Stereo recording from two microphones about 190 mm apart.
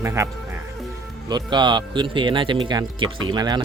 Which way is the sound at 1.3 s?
25° right (ahead or behind).